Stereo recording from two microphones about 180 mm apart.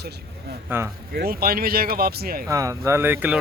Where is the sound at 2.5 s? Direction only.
20° right (ahead or behind).